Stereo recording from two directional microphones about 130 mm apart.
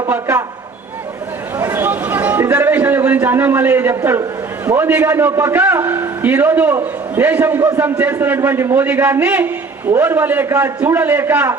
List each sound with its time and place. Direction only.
0.1 s a man's voice: 15° right (ahead or behind)
1.5 s a man's voice: 20° right (ahead or behind)